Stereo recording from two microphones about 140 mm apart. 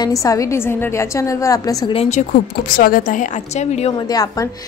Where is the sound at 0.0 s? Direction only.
25° left (ahead or behind).